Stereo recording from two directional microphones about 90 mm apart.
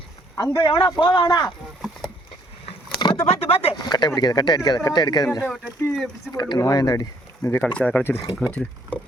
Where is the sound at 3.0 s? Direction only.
50° left (ahead or behind).